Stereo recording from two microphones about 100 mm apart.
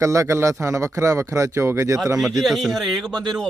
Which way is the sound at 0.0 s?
30° right (ahead or behind).